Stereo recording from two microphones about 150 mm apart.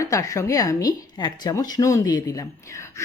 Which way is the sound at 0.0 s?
20° left (ahead or behind).